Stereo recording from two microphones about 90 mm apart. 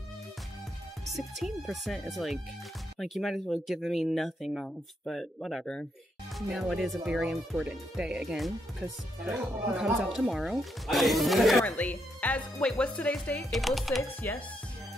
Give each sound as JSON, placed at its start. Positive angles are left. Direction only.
{"t": 1.1, "sound": "speech", "side_deg": 0}
{"t": 11.6, "sound": "speech", "side_deg": 15}
{"t": 13.5, "sound": "speech", "side_deg": 0}
{"t": 14.2, "sound": "speech", "side_deg": 20}